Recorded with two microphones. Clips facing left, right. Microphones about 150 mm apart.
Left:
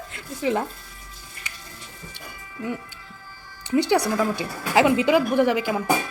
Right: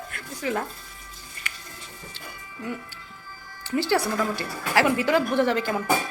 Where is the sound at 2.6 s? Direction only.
20° left (ahead or behind).